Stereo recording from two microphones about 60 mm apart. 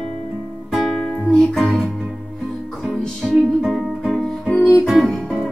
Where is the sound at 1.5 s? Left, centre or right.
Centre.